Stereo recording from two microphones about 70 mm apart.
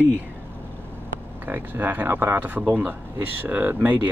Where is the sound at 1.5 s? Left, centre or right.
Right.